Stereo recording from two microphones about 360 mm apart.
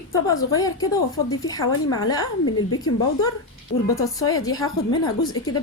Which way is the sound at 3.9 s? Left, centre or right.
Centre.